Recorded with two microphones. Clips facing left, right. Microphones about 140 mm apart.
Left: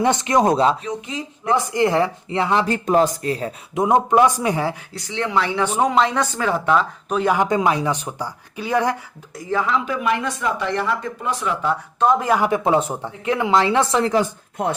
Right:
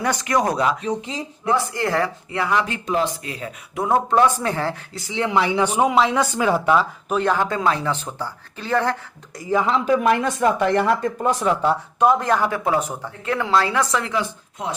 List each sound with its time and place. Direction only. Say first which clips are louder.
0.0 s speech: left 4 dB; 25° left (ahead or behind)
0.9 s speech: right 2 dB; 30° right (ahead or behind)
1.5 s speech: left 3 dB; 20° left (ahead or behind)
2.7 s speech: left 5 dB; 40° left (ahead or behind)
3.8 s speech: left 2 dB; 20° left (ahead or behind)
5.1 s speech: right 1 dB; 15° right (ahead or behind)
7.3 s speech: left 3 dB; 15° left (ahead or behind)
9.6 s speech: right 6 dB; 40° right (ahead or behind)
12.2 s speech: left 1 dB; 10° left (ahead or behind)
12.5 s speech: left 3 dB; 20° left (ahead or behind); by 14.3 s 35° left (ahead or behind)
14.6 s speech: left 6 dB; 55° left (ahead or behind)